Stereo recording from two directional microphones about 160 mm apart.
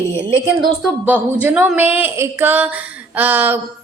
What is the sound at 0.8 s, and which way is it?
A woman's voice, 10° right (ahead or behind).